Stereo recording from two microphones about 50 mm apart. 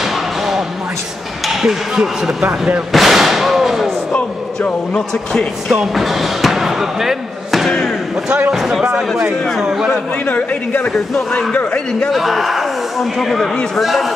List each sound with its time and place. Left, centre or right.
0.0 s a sound: centre
1.4 s speech: centre
2.9 s a sound: centre
5.7 s speech: centre
9.6 s a man's voice: centre
10.2 s speech: left
12.1 s a man's voice: centre